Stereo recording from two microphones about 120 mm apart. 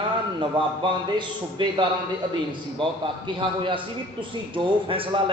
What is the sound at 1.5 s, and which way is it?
Speech, 45° right (ahead or behind).